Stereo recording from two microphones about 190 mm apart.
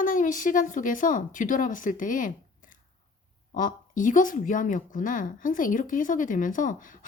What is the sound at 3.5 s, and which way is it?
Speech, 45° left (ahead or behind).